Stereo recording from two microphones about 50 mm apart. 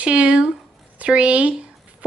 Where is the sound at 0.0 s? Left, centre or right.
Right.